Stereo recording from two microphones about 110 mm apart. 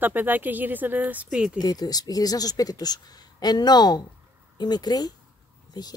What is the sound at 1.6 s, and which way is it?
Speech, 35° left (ahead or behind).